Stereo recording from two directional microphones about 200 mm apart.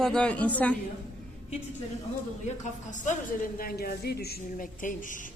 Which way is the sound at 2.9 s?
40° left (ahead or behind).